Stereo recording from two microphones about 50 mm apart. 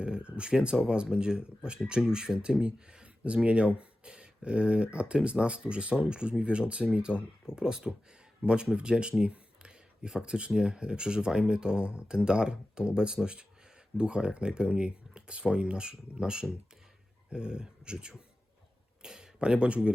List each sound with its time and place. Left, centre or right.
0.0 s speech: centre
9.2 s a sound: right
10.5 s speech: centre